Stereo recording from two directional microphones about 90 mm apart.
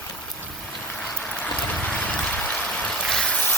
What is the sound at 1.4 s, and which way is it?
Vehicle, 20° left (ahead or behind).